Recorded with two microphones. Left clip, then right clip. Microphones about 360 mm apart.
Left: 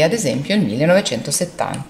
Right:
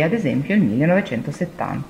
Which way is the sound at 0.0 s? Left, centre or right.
Left.